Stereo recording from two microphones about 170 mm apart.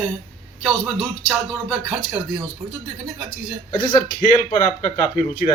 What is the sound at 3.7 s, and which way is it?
A man's voice, 25° left (ahead or behind).